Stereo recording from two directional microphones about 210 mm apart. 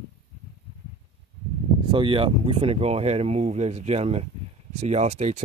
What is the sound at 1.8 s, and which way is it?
Speech, 25° right (ahead or behind).